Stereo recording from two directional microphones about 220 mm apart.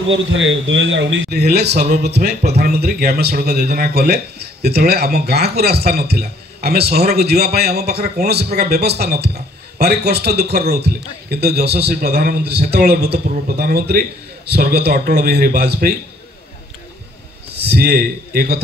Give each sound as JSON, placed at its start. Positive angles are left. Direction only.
{"t": 0.1, "sound": "a man's voice", "side_deg": -60}
{"t": 17.6, "sound": "a man's voice", "side_deg": -45}